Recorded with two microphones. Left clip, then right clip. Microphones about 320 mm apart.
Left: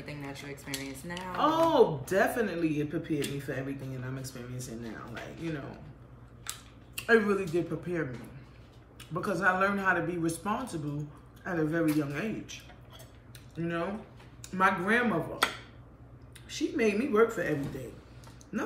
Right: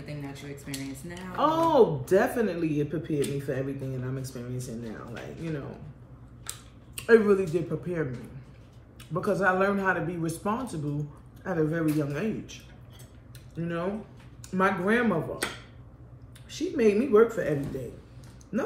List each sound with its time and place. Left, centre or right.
0.0 s speech: centre
1.4 s speech: centre
7.0 s speech: centre
9.1 s speech: centre
13.6 s speech: centre
16.4 s speech: centre